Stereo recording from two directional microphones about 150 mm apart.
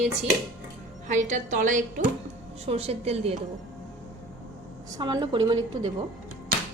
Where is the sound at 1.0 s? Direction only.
55° right (ahead or behind).